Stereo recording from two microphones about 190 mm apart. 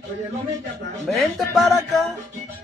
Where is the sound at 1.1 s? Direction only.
Centre (ahead or behind).